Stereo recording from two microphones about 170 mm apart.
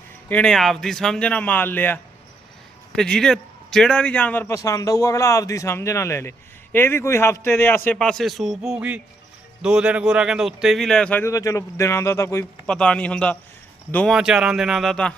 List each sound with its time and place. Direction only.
0.3 s a man's voice: 5° left (ahead or behind)
12.6 s a man's voice: 5° left (ahead or behind)
14.2 s speech: 5° right (ahead or behind)